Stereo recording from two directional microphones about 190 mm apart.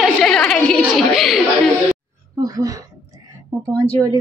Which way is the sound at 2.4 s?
20° right (ahead or behind).